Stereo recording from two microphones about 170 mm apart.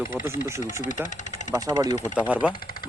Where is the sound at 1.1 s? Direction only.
45° left (ahead or behind).